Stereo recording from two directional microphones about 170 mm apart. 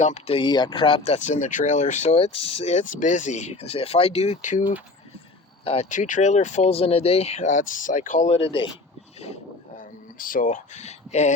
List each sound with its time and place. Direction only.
0.0 s speech: 40° left (ahead or behind)
5.6 s speech: 40° left (ahead or behind)
9.2 s a sound: 40° left (ahead or behind)
10.2 s speech: 55° left (ahead or behind)